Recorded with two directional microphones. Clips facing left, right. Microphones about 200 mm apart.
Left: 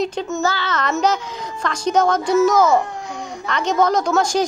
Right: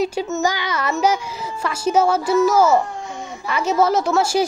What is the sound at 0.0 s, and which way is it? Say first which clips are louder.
A child's voice: right 1 dB; 10° right (ahead or behind).